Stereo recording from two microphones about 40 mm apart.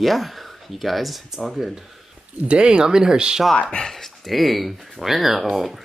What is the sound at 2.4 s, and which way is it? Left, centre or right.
Speech, right.